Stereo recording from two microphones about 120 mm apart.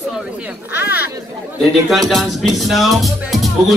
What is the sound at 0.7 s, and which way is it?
Speech, 15° right (ahead or behind).